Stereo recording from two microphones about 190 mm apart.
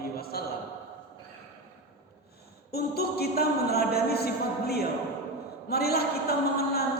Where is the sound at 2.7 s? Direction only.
55° left (ahead or behind).